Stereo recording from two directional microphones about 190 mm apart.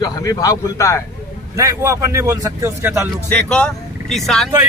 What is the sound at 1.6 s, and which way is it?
Speech, 15° right (ahead or behind).